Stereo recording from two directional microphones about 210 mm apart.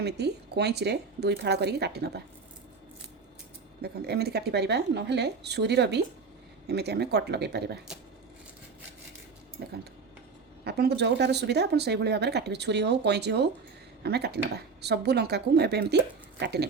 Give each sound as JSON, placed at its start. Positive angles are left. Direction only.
{"t": 0.0, "sound": "speech", "side_deg": -55}
{"t": 3.8, "sound": "speech", "side_deg": -50}
{"t": 9.6, "sound": "speech", "side_deg": -55}